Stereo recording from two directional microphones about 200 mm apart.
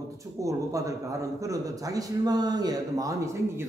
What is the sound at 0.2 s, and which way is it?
A man's voice, 15° right (ahead or behind).